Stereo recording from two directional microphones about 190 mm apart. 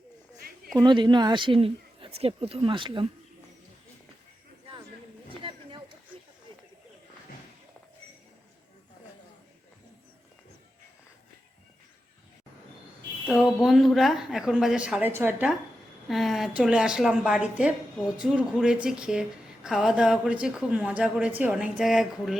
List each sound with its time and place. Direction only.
0.8 s speech: 25° right (ahead or behind)
5.3 s chatter: 25° right (ahead or behind)
13.2 s a woman's voice: 5° right (ahead or behind)
16.0 s a woman's voice: centre (ahead or behind)